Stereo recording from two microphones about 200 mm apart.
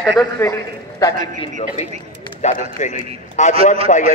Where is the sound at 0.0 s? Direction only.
Centre (ahead or behind).